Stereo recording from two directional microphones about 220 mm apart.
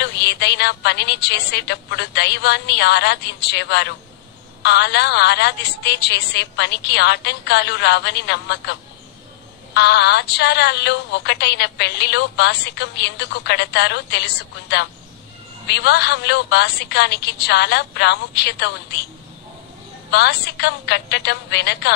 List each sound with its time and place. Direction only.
0.0 s a woman's voice: 50° left (ahead or behind)
9.8 s a woman's voice: 50° left (ahead or behind)
20.1 s a woman's voice: 50° left (ahead or behind)